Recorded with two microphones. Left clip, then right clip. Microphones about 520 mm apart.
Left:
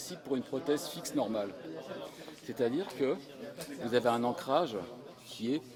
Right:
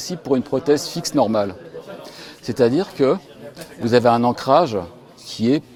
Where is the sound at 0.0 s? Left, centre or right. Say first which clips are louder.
Right 15 dB; right.